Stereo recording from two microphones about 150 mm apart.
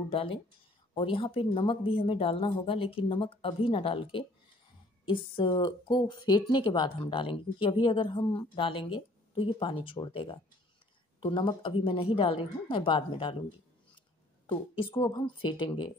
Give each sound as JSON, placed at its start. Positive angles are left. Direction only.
{"t": 0.1, "sound": "speech", "side_deg": 35}
{"t": 14.4, "sound": "speech", "side_deg": 35}